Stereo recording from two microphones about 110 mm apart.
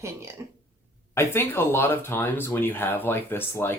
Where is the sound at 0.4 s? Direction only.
25° right (ahead or behind).